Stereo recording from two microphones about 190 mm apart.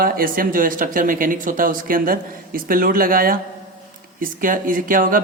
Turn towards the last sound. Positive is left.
turn(degrees=-45)  # may be behind; listen again after turning